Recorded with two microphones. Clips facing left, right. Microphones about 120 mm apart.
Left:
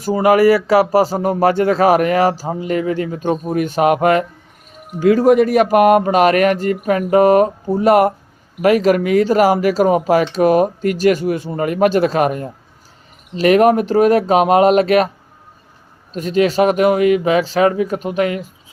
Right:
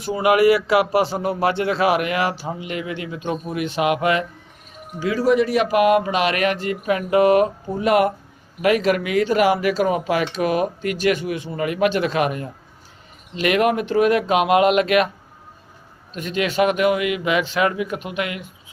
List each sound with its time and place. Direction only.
0.0 s speech: 40° left (ahead or behind)
16.1 s speech: 40° left (ahead or behind)